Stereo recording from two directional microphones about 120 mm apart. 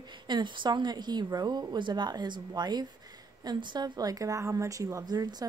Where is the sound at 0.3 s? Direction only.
40° right (ahead or behind).